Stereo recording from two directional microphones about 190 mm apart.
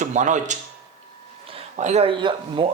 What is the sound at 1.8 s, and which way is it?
Speech, 35° right (ahead or behind).